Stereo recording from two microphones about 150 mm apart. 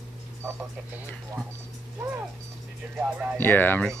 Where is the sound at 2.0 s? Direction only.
15° right (ahead or behind).